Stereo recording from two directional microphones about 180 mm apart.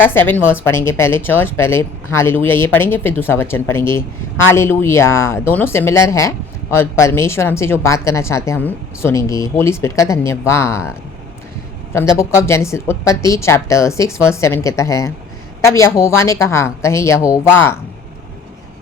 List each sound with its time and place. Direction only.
0.0 s speech: 10° left (ahead or behind)
11.9 s speech: 15° left (ahead or behind)